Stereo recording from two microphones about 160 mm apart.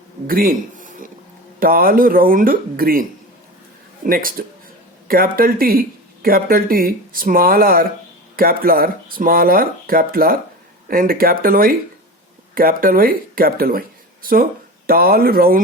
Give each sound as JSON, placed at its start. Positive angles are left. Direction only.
{"t": 0.3, "sound": "a man's voice", "side_deg": -60}